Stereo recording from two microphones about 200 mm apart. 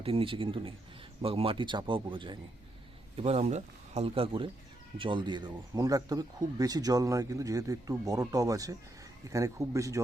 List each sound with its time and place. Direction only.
0.0 s speech: 30° right (ahead or behind)